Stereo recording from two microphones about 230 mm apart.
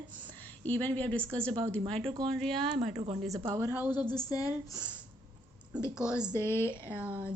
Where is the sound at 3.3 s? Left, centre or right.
Centre.